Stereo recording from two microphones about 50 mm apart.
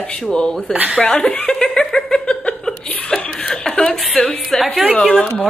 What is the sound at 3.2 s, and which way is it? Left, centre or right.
Chuckle, centre.